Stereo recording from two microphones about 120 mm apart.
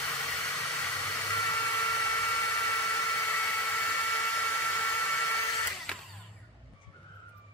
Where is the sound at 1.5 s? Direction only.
15° left (ahead or behind).